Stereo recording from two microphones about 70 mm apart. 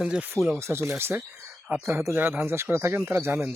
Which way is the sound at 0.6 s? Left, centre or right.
Right.